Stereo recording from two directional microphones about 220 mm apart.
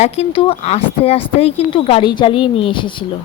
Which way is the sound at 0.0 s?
25° left (ahead or behind).